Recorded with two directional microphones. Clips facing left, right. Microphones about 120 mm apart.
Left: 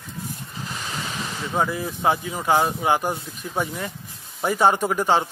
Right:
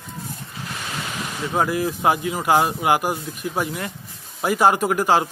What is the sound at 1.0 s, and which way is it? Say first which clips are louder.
Speech: right 2 dB; 15° right (ahead or behind).